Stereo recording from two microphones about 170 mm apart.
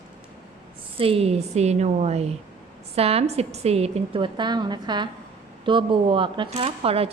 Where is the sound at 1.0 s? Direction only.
35° right (ahead or behind).